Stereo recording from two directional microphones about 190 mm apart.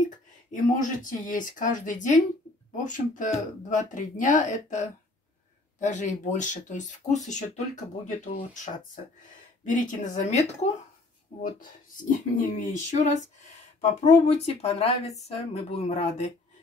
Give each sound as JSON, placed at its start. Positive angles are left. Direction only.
{"t": 0.5, "sound": "speech", "side_deg": 40}
{"t": 12.5, "sound": "speech", "side_deg": 40}